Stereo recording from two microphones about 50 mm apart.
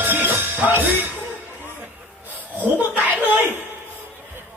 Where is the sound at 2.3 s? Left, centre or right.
Right.